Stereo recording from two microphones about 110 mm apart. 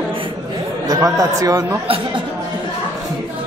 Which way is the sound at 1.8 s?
55° right (ahead or behind).